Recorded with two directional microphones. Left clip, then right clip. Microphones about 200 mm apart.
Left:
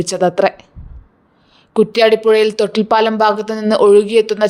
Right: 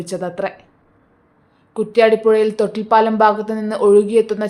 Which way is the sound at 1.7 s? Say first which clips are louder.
Left 2 dB; 45° left (ahead or behind).